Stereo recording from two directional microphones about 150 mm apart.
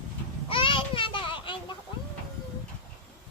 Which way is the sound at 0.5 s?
35° left (ahead or behind).